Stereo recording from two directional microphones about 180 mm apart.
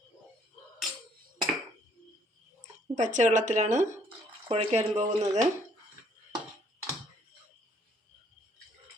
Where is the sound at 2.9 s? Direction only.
45° right (ahead or behind).